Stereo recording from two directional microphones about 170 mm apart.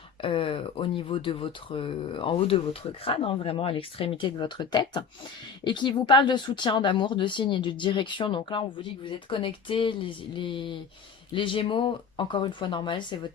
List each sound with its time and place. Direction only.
0.2 s speech: 30° left (ahead or behind)